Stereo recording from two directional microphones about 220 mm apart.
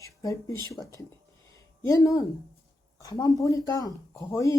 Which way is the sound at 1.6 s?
15° left (ahead or behind).